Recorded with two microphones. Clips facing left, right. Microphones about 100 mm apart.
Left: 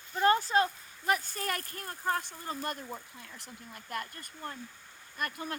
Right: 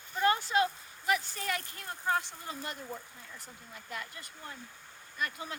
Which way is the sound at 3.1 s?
80° left.